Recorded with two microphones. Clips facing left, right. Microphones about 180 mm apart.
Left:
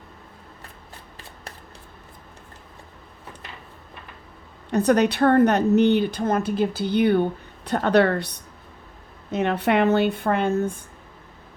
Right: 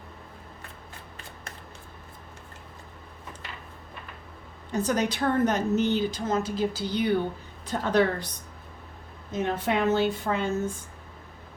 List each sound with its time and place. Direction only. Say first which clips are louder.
4.7 s a woman's voice: left 7 dB; 65° left (ahead or behind)
9.3 s a woman's voice: left 6 dB; 70° left (ahead or behind)